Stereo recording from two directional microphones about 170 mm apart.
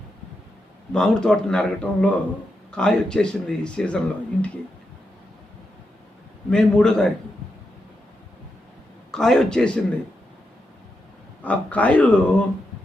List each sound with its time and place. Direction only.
0.9 s speech: 5° left (ahead or behind)
6.5 s speech: 5° left (ahead or behind)
9.1 s speech: 5° left (ahead or behind)
11.4 s speech: 10° left (ahead or behind)